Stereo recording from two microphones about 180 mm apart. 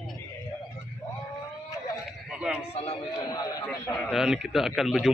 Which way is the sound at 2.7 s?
35° left (ahead or behind).